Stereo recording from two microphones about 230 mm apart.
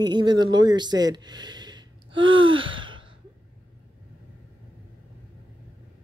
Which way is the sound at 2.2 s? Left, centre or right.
Right.